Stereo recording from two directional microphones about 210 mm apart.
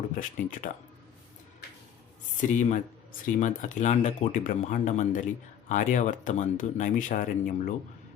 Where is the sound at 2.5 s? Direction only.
35° left (ahead or behind).